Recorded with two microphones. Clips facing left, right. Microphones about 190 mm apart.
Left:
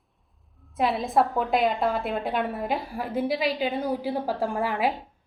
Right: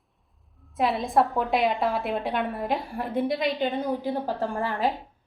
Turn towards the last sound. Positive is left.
turn(degrees=10)  # may be behind; listen again after turning